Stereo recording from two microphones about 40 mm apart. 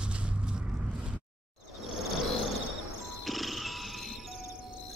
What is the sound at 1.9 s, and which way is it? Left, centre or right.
Cricket, centre.